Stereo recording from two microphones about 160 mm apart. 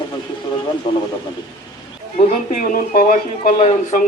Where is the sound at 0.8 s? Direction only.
30° left (ahead or behind).